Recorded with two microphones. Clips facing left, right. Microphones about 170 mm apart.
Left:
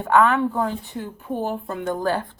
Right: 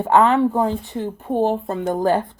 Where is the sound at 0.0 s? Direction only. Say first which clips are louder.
Right 3 dB; 25° right (ahead or behind).